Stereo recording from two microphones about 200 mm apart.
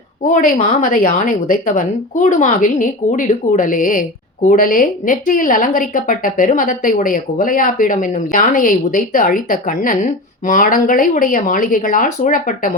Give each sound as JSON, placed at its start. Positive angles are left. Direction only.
{"t": 0.3, "sound": "a woman's voice", "side_deg": 40}